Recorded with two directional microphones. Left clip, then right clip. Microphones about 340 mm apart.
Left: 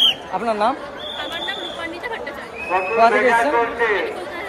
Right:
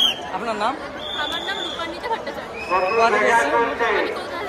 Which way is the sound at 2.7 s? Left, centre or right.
Left.